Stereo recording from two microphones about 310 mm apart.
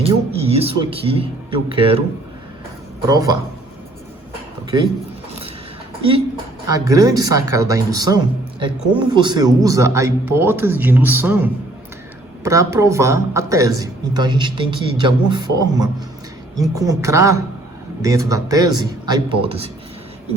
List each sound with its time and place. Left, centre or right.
0.0 s speech: centre
3.1 s speech: centre
6.0 s speech: centre